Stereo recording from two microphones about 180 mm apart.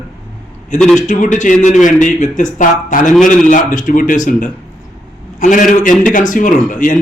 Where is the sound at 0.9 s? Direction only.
45° left (ahead or behind).